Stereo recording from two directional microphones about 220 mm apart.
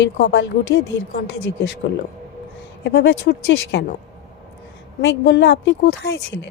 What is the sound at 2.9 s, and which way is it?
Speech, 50° left (ahead or behind).